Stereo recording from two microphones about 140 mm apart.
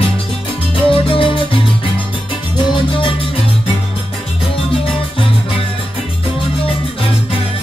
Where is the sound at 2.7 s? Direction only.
35° left (ahead or behind).